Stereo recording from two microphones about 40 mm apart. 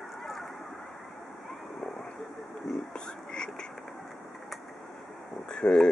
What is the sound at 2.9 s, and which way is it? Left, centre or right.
Frog, centre.